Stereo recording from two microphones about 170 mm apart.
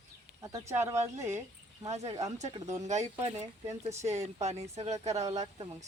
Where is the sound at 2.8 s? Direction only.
45° right (ahead or behind).